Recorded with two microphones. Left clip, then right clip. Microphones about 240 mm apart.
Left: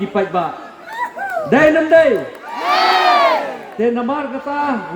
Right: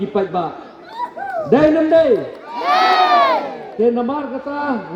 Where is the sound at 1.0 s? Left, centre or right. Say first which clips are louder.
Left 2 dB; left.